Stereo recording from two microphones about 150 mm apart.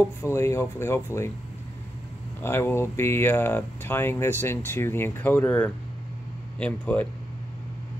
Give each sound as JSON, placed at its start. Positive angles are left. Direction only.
{"t": 0.2, "sound": "speech", "side_deg": 20}
{"t": 2.4, "sound": "speech", "side_deg": 15}